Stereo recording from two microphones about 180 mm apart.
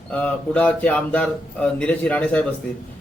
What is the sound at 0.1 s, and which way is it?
A man's voice, 10° left (ahead or behind).